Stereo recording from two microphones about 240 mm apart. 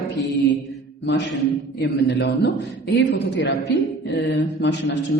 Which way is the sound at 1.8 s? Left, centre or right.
Left.